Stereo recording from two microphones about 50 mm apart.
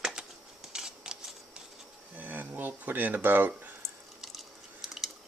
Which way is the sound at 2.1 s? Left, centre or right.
Right.